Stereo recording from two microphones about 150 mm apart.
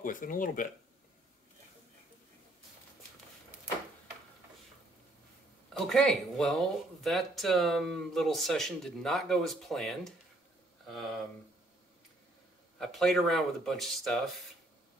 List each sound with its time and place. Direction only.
0.0 s speech: 65° left (ahead or behind)
5.7 s speech: centre (ahead or behind)
12.7 s speech: centre (ahead or behind)